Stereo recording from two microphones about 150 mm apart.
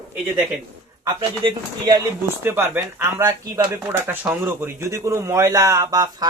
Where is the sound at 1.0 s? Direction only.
30° right (ahead or behind).